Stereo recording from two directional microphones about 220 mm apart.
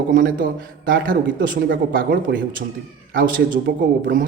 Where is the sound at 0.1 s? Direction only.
40° right (ahead or behind).